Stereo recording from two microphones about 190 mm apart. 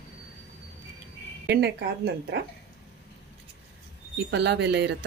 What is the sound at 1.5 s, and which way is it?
Speech, 60° right (ahead or behind).